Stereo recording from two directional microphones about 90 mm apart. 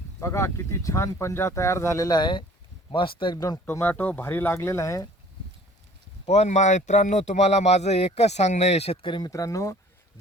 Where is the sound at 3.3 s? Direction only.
45° left (ahead or behind).